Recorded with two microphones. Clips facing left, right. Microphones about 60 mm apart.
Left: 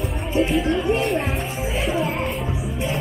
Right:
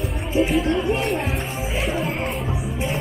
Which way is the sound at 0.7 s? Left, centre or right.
Centre.